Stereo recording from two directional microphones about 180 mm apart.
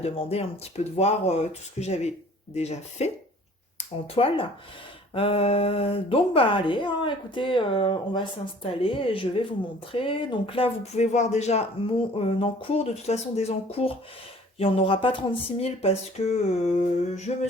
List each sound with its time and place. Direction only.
0.0 s speech: 35° left (ahead or behind)